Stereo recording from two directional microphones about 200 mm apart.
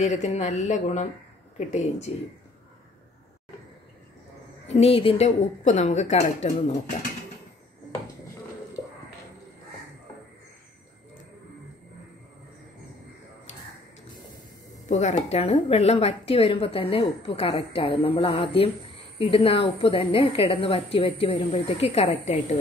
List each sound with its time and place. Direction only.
0.0 s speech: 35° left (ahead or behind)
4.6 s speech: 30° left (ahead or behind)
14.9 s a woman's voice: 35° left (ahead or behind)